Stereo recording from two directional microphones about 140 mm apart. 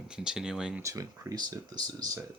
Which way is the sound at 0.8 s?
25° right (ahead or behind).